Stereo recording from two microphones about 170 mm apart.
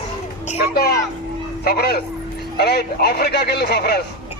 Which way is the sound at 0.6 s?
65° left (ahead or behind).